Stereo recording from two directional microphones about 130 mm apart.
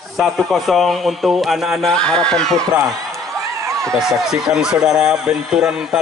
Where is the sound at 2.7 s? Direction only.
30° right (ahead or behind).